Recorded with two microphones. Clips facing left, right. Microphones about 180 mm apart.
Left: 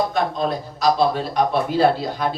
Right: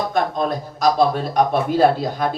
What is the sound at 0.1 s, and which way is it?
A man's voice, 50° right (ahead or behind).